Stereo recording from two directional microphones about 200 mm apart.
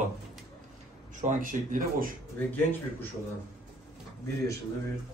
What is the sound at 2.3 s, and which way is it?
Speech, 10° left (ahead or behind).